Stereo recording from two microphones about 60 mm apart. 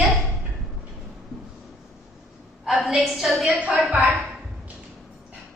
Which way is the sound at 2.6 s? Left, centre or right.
Centre.